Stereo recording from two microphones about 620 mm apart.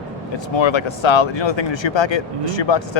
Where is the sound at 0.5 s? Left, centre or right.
Left.